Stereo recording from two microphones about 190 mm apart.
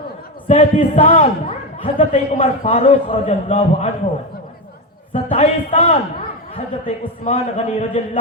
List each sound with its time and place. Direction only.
0.4 s a man's voice: 35° left (ahead or behind)
5.1 s a man's voice: 30° left (ahead or behind)